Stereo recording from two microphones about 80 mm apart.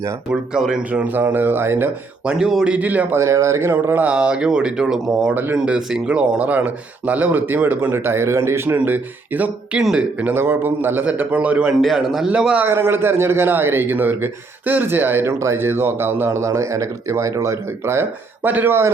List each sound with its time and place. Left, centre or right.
0.5 s a man's voice: centre; by 1.9 s right
2.2 s speech: centre
2.7 s a man's voice: right
3.2 s speech: right
3.8 s a man's voice: right
4.1 s speech: centre
5.3 s a man's voice: right
5.5 s a man's voice: centre
9.7 s a man's voice: centre
11.8 s a man's voice: centre
12.6 s a man's voice: right
18.4 s a man's voice: right